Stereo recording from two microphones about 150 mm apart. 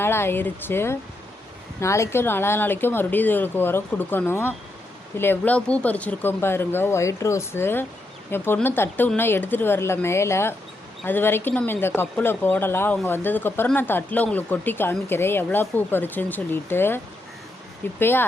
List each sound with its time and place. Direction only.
0.0 s speech: 15° left (ahead or behind)
18.0 s speech: 15° left (ahead or behind)